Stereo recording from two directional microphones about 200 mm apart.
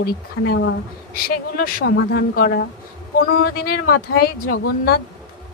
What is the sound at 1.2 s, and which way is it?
Speech, 50° left (ahead or behind).